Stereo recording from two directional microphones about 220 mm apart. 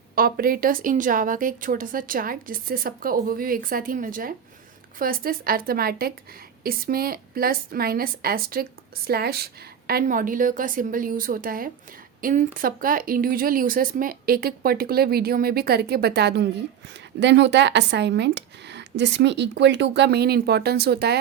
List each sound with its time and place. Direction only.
0.2 s a woman's voice: 40° right (ahead or behind)